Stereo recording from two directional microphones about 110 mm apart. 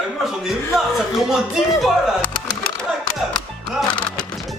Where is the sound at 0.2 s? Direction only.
5° right (ahead or behind).